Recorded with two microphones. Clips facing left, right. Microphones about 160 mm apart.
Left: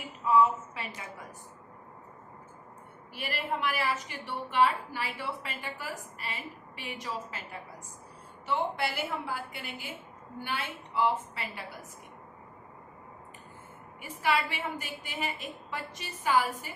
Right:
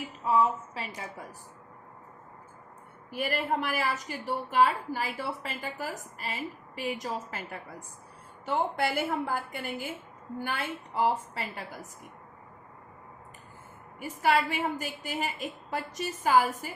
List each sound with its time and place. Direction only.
0.3 s a woman's voice: 35° right (ahead or behind)
3.1 s a woman's voice: 45° right (ahead or behind)
8.4 s a woman's voice: 45° right (ahead or behind)
14.0 s a woman's voice: 40° right (ahead or behind)